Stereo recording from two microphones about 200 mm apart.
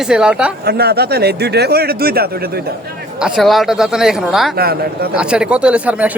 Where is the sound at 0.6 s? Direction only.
55° right (ahead or behind).